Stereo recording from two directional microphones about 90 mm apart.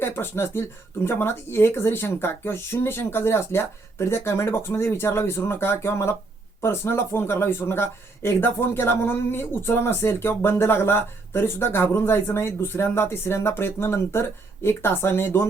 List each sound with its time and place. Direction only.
0.0 s speech: 25° left (ahead or behind)